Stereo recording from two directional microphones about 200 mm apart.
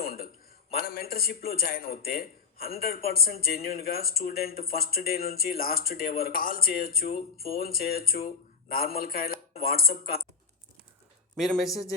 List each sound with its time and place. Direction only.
0.0 s a sound: 50° left (ahead or behind)
0.7 s a man's voice: 50° left (ahead or behind)
11.3 s a man's voice: centre (ahead or behind)